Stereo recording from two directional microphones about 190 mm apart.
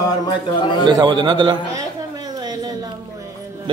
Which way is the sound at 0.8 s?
25° right (ahead or behind).